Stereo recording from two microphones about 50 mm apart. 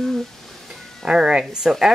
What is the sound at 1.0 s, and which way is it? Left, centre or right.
Speech, centre.